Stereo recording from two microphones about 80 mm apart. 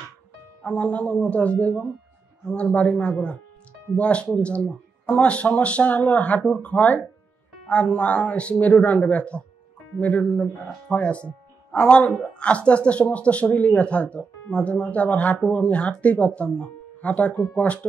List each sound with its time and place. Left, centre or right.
0.7 s speech: centre